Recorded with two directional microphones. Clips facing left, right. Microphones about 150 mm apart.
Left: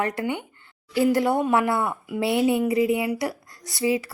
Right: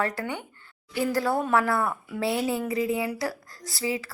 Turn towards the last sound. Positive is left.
turn(degrees=20)  # may be behind; listen again after turning